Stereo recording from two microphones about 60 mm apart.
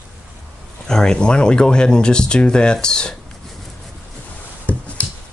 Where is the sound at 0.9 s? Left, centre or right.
Centre.